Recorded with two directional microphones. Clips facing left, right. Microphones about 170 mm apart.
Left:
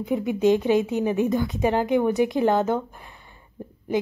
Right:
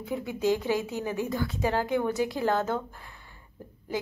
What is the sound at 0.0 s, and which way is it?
Speech, 20° left (ahead or behind).